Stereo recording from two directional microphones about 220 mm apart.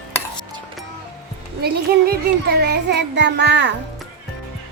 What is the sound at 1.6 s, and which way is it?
Child singing, 45° right (ahead or behind).